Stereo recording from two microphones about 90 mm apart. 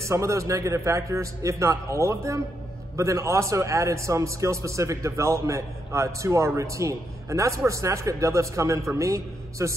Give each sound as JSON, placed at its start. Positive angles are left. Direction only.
{"t": 0.0, "sound": "a man's voice", "side_deg": -35}